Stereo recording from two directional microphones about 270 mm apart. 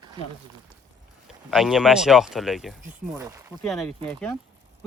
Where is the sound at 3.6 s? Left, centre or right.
Centre.